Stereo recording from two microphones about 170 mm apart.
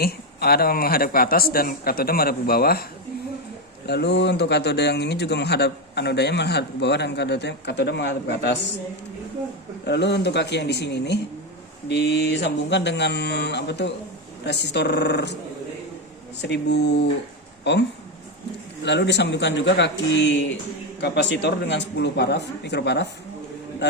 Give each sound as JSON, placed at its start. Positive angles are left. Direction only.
{"t": 0.0, "sound": "a man's voice", "side_deg": 65}
{"t": 3.8, "sound": "a man's voice", "side_deg": 85}
{"t": 9.8, "sound": "a man's voice", "side_deg": 85}
{"t": 11.9, "sound": "a man's voice", "side_deg": 80}
{"t": 16.4, "sound": "a man's voice", "side_deg": 90}
{"t": 18.9, "sound": "a man's voice", "side_deg": 90}